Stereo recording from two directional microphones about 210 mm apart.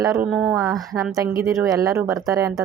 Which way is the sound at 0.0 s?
15° right (ahead or behind).